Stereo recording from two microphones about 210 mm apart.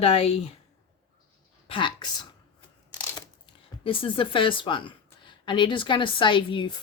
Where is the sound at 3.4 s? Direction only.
25° left (ahead or behind).